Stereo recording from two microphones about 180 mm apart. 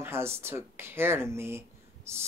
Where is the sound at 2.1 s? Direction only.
15° right (ahead or behind).